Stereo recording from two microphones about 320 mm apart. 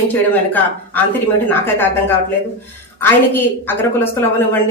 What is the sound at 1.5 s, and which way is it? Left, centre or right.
A woman's voice, centre.